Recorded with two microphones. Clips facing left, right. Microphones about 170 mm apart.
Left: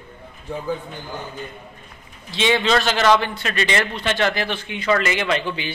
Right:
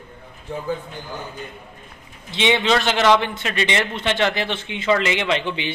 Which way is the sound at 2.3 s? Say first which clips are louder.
Even; 20° right (ahead or behind).